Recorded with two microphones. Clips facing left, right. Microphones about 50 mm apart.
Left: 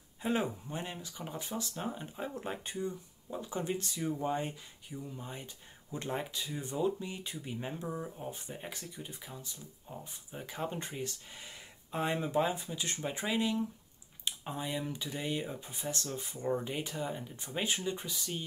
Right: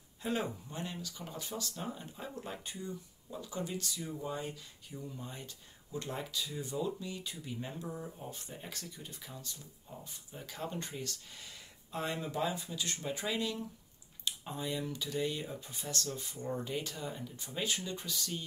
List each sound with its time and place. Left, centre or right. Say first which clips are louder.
0.2 s speech: left 3 dB; left
4.9 s speech: left 2 dB; centre